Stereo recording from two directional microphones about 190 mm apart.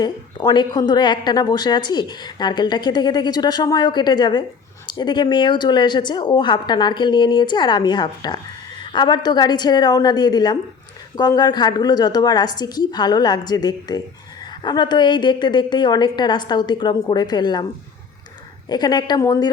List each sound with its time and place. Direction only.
0.0 s a woman's voice: 25° left (ahead or behind)
18.7 s a woman's voice: 20° left (ahead or behind)